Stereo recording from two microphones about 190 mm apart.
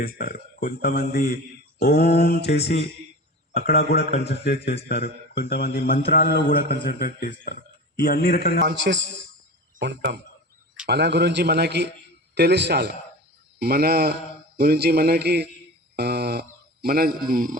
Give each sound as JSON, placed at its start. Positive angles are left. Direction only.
{"t": 0.0, "sound": "a man's voice", "side_deg": 50}
{"t": 8.6, "sound": "a man's voice", "side_deg": -70}